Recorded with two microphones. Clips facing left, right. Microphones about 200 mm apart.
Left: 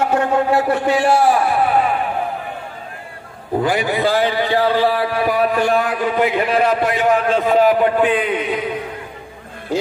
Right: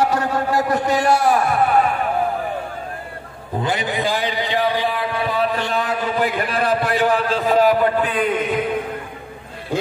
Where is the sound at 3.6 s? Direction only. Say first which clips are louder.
Left 4 dB; 20° right (ahead or behind).